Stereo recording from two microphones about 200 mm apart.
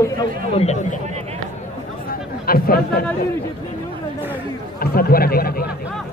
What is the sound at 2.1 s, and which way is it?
Chatter, 45° left (ahead or behind).